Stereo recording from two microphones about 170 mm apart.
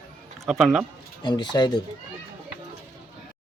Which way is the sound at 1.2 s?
25° left (ahead or behind).